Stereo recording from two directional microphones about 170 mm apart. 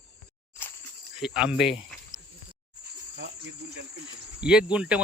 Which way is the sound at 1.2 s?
5° right (ahead or behind).